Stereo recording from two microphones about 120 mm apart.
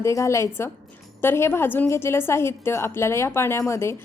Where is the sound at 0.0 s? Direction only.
25° left (ahead or behind).